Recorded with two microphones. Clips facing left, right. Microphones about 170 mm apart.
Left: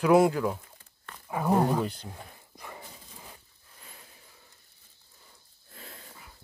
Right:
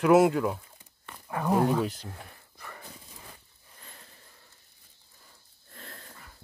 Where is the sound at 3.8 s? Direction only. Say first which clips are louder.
Even; 5° left (ahead or behind).